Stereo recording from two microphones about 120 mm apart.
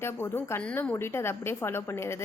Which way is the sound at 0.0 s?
20° left (ahead or behind).